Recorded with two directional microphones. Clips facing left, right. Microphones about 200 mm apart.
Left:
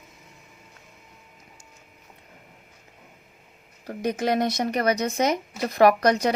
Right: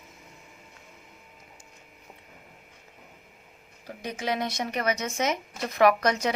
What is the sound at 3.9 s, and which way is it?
A woman's voice, 45° left (ahead or behind).